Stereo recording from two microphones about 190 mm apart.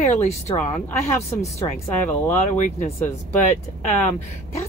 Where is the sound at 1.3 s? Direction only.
15° left (ahead or behind).